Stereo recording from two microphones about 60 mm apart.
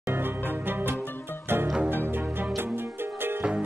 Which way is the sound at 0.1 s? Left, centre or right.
Right.